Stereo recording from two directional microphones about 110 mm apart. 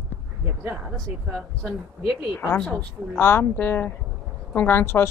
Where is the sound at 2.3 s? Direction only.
15° left (ahead or behind).